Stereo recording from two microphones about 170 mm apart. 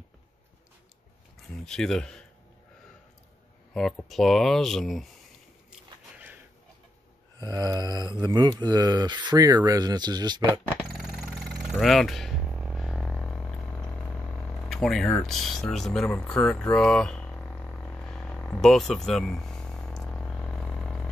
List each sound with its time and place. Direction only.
1.7 s speech: 5° left (ahead or behind)
3.7 s speech: centre (ahead or behind)
5.7 s a sound: 10° right (ahead or behind)
7.3 s speech: 25° right (ahead or behind)
10.9 s vehicle: centre (ahead or behind)
11.7 s a sound: centre (ahead or behind)